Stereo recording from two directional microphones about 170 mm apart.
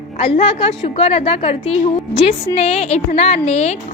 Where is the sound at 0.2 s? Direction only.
40° left (ahead or behind).